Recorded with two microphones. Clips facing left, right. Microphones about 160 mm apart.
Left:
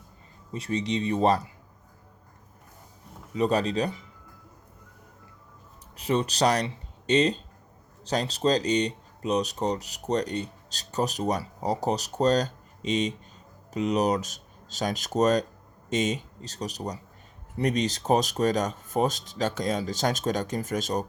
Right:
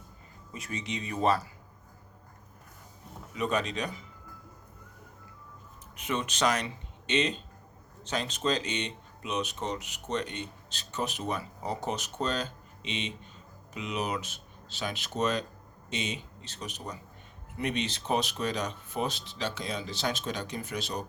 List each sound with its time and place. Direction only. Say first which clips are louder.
0.5 s speech: left 9 dB; 30° left (ahead or behind)
3.3 s speech: left 6 dB; 35° left (ahead or behind)
6.0 s speech: left 5 dB; 35° left (ahead or behind)